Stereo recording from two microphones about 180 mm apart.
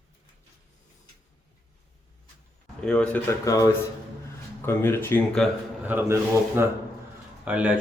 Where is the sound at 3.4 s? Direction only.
20° left (ahead or behind).